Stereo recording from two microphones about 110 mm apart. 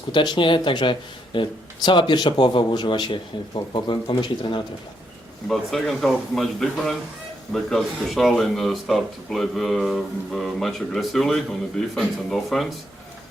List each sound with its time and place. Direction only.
0.1 s speech: 45° left (ahead or behind)
5.5 s speech: centre (ahead or behind)